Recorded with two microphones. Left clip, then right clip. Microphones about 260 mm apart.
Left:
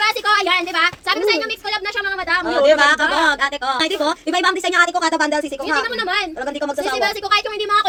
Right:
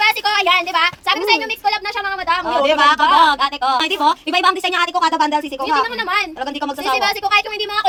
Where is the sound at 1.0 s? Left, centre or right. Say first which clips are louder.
Right 2 dB; centre.